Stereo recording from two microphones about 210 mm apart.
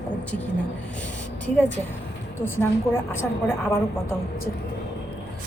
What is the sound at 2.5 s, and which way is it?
Speech, 10° left (ahead or behind).